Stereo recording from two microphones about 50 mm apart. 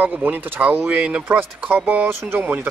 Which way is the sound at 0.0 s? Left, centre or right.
Right.